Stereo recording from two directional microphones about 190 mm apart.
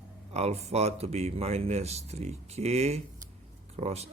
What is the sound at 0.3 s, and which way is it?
Speech, 35° right (ahead or behind).